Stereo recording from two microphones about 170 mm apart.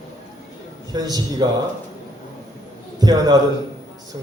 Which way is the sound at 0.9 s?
25° right (ahead or behind).